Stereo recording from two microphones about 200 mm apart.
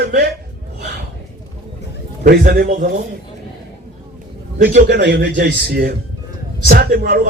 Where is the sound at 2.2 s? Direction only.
50° right (ahead or behind).